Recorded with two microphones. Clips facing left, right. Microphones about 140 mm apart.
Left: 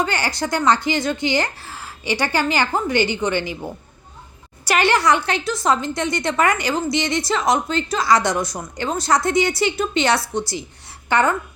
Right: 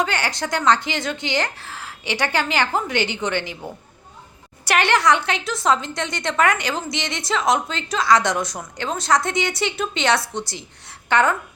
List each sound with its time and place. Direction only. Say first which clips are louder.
0.0 s a woman's voice: left 1 dB; centre (ahead or behind)
4.6 s a woman's voice: left 1 dB; centre (ahead or behind)